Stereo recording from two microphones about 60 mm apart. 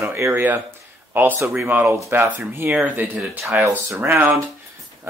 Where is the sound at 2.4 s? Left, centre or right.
Right.